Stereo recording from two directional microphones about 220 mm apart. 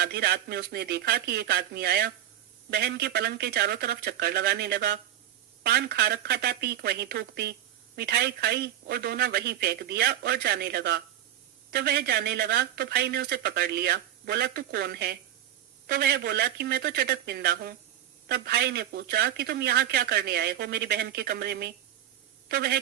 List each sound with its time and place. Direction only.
0.0 s speech: 45° right (ahead or behind)